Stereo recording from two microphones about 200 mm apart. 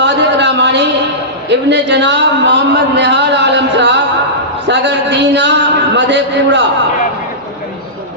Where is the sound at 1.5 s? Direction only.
60° right (ahead or behind).